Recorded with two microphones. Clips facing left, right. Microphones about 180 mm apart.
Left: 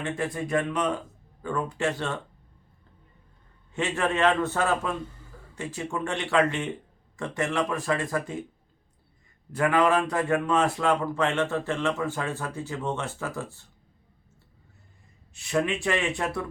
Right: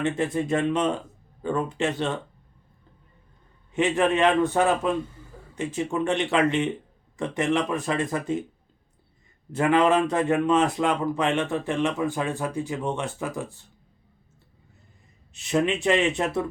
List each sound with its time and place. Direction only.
0.0 s speech: 20° right (ahead or behind)
3.7 s a man's voice: 15° right (ahead or behind)
9.5 s a man's voice: 25° right (ahead or behind)
15.3 s speech: 20° right (ahead or behind)